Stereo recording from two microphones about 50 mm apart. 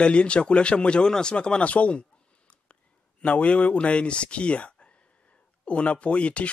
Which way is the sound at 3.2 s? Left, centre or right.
Left.